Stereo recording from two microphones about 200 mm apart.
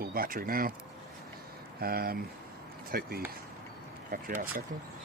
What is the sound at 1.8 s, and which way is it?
Speech, 50° right (ahead or behind).